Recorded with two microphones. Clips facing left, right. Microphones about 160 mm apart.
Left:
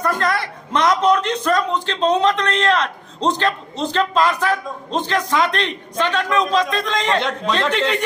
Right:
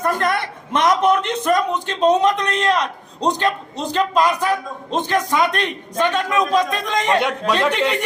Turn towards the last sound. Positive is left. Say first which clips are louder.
# right 1 dB
turn(degrees=-15)  # may be behind; listen again after turning